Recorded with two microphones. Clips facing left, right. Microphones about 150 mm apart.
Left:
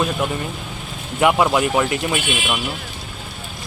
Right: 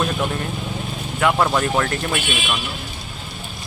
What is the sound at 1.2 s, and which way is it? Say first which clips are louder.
Speech: left 2 dB; 15° left (ahead or behind).